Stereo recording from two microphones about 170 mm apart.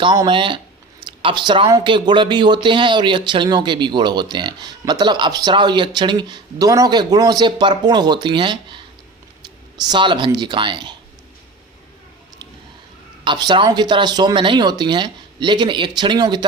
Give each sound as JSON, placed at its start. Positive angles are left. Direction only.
{"t": 0.0, "sound": "speech", "side_deg": -30}
{"t": 13.2, "sound": "speech", "side_deg": -25}